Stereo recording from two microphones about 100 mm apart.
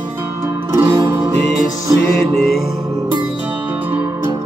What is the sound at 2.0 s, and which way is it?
Music, centre (ahead or behind).